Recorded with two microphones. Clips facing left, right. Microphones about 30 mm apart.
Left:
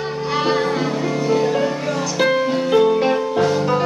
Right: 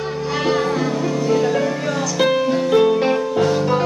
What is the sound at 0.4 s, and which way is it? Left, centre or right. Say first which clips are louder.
Music: even; left.